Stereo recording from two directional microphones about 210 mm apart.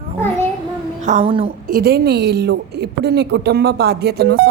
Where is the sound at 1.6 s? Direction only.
50° right (ahead or behind).